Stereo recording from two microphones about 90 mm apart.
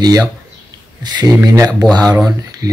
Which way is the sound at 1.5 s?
45° right (ahead or behind).